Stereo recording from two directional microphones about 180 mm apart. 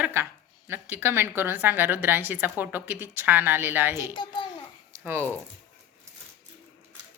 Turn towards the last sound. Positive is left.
turn(degrees=-15)  # may be behind; listen again after turning